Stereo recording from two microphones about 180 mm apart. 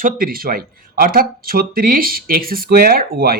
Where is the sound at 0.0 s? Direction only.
55° right (ahead or behind).